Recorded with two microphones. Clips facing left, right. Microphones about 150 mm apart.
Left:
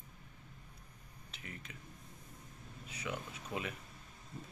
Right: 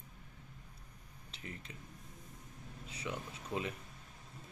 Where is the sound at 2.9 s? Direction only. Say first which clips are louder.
Even; 25° right (ahead or behind).